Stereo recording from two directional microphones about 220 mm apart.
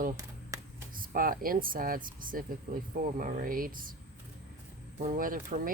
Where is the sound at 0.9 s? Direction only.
40° right (ahead or behind).